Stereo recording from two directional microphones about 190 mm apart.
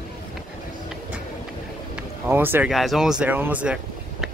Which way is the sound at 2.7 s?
Centre (ahead or behind).